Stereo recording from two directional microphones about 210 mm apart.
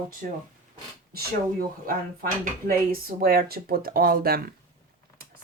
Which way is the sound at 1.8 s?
45° right (ahead or behind).